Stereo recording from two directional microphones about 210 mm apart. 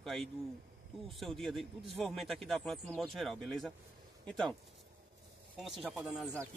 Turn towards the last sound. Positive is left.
turn(degrees=0)  # may be behind; listen again after turning